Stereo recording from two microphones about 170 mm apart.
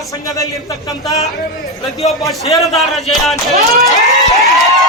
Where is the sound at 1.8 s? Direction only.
Centre (ahead or behind).